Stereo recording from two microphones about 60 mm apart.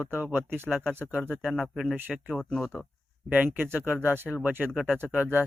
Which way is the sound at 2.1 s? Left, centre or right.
Centre.